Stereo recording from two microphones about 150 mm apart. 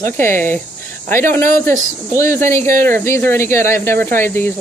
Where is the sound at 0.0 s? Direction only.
15° left (ahead or behind).